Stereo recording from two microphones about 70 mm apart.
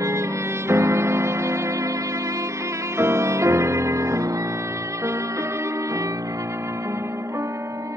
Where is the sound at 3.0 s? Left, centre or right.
Right.